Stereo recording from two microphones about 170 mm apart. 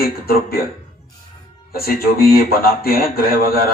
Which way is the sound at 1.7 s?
65° left (ahead or behind).